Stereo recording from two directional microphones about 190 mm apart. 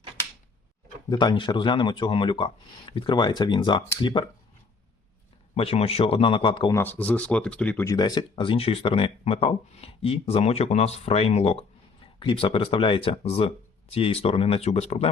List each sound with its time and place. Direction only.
1.1 s speech: 25° left (ahead or behind)
5.5 s speech: 30° left (ahead or behind)
6.7 s speech: 10° left (ahead or behind)
7.9 s speech: 20° left (ahead or behind)